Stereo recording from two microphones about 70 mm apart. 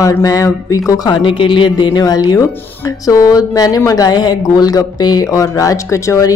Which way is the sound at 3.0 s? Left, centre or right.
Left.